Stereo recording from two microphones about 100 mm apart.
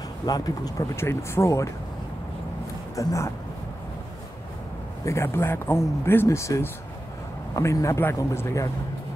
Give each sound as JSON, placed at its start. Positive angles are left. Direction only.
{"t": 0.3, "sound": "speech", "side_deg": 40}
{"t": 0.9, "sound": "speech", "side_deg": 25}
{"t": 3.0, "sound": "speech", "side_deg": 30}
{"t": 5.0, "sound": "speech", "side_deg": 30}